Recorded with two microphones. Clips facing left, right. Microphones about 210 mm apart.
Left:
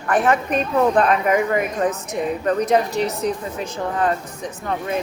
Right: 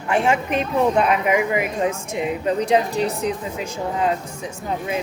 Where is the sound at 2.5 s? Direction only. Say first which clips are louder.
Even; 35° right (ahead or behind).